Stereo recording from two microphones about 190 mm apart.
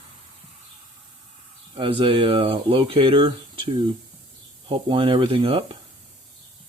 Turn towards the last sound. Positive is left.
turn(degrees=-30)  # may be behind; listen again after turning